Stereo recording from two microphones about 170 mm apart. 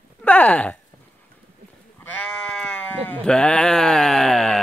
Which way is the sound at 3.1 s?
5° left (ahead or behind).